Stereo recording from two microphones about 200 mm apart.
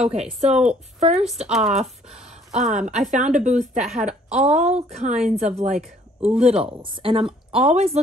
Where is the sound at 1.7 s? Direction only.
35° right (ahead or behind).